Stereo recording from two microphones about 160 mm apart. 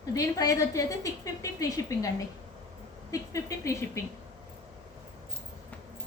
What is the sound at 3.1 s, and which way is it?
Speech, 20° left (ahead or behind).